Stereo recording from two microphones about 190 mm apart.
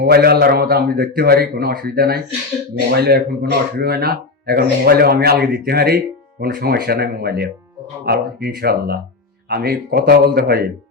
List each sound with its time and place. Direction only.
0.0 s a man's voice: 55° right (ahead or behind)